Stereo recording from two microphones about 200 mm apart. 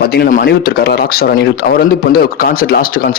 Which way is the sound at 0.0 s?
50° left (ahead or behind).